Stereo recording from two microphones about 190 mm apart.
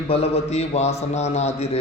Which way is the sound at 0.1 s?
35° left (ahead or behind).